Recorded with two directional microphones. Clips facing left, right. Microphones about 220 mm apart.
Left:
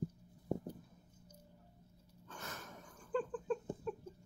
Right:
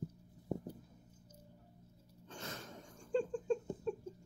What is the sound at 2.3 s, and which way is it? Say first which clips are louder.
Wheeze: right 2 dB; 30° right (ahead or behind).